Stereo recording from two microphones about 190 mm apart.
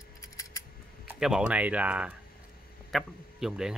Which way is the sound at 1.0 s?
5° right (ahead or behind).